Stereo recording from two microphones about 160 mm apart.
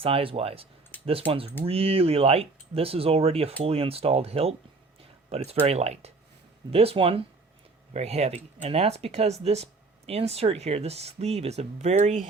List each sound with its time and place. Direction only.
0.0 s speech: 35° right (ahead or behind)